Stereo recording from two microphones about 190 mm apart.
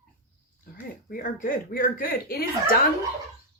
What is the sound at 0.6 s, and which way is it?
Speech, 50° left (ahead or behind).